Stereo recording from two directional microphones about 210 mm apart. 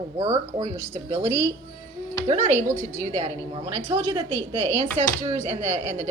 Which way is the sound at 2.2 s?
35° right (ahead or behind).